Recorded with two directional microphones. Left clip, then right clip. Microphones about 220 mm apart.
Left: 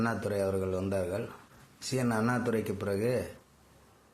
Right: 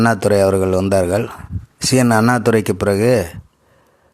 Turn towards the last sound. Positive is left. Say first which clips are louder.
# right 16 dB
turn(degrees=-50)  # may be behind; listen again after turning